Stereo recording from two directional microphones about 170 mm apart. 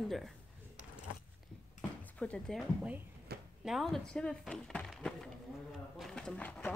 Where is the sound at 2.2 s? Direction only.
5° left (ahead or behind).